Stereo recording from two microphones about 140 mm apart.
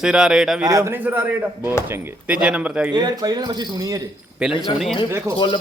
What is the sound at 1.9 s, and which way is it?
Speech, 10° right (ahead or behind).